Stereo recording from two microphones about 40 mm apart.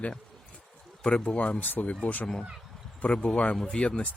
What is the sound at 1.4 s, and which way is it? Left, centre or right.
Speech, left.